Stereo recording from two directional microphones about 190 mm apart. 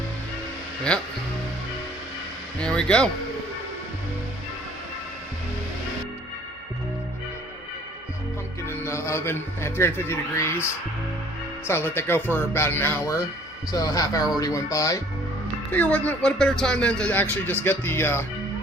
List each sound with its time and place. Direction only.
0.9 s speech: 5° left (ahead or behind)
2.6 s speech: 5° left (ahead or behind)
8.6 s a man's voice: 15° left (ahead or behind)
11.7 s speech: 10° left (ahead or behind)